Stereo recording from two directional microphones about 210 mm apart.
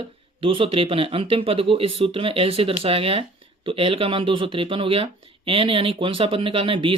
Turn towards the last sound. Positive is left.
turn(degrees=-25)  # may be behind; listen again after turning